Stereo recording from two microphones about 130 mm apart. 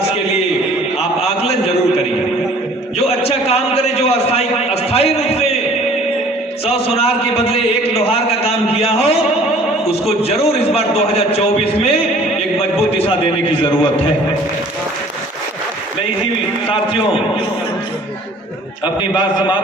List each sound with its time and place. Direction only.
1.2 s a man's voice: 50° left (ahead or behind)
3.0 s a man's voice: 50° left (ahead or behind)
6.7 s a man's voice: 50° left (ahead or behind)
13.0 s a man's voice: 45° left (ahead or behind)
16.6 s a man's voice: 45° left (ahead or behind)